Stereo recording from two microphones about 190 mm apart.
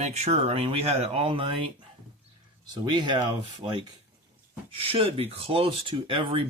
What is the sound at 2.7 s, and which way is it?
Speech, 25° right (ahead or behind).